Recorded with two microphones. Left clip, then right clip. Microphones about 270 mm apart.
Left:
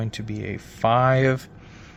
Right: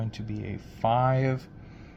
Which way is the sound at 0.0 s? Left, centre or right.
Left.